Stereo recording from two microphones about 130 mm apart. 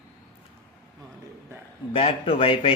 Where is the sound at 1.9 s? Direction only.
45° left (ahead or behind).